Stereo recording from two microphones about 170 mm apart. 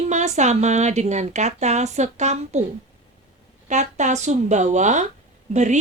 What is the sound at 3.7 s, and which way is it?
Speech, 45° right (ahead or behind).